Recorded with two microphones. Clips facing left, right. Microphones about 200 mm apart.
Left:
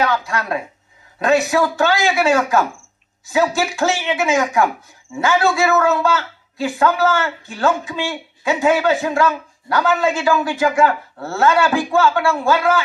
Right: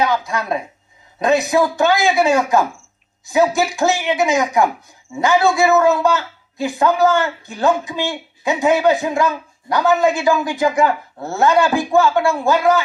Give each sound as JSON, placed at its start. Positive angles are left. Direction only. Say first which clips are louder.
{"t": 0.0, "sound": "a man's voice", "louder": "right 1 dB", "side_deg": -15}